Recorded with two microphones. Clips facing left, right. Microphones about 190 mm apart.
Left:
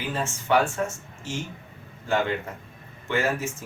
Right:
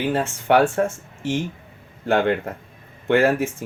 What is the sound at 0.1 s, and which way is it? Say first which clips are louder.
Speech: right 3 dB; 60° right (ahead or behind).